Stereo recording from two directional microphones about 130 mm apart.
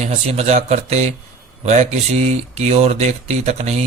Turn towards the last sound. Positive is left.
turn(degrees=-60)  # may be behind; listen again after turning